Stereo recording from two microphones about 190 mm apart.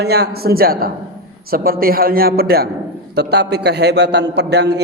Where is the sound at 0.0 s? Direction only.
55° right (ahead or behind).